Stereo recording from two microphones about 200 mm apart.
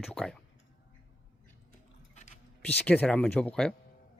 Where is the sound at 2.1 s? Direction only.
35° left (ahead or behind).